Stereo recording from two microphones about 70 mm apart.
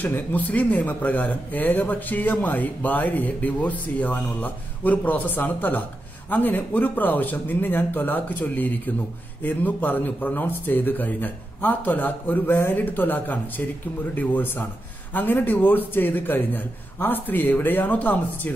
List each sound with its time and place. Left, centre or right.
0.0 s speech: left